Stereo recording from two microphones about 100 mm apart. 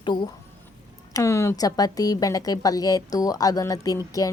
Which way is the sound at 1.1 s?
30° left (ahead or behind).